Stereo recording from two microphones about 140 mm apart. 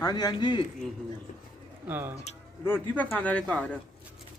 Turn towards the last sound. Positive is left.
turn(degrees=10)  # may be behind; listen again after turning